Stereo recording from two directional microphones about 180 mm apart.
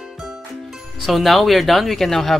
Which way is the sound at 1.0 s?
Centre (ahead or behind).